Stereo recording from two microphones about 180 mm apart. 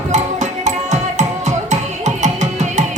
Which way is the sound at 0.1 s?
40° right (ahead or behind).